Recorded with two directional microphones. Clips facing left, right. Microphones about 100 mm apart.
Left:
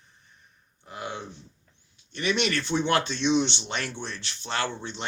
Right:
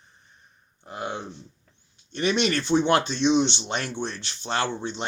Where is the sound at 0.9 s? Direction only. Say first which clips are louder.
Right 3 dB; 30° right (ahead or behind).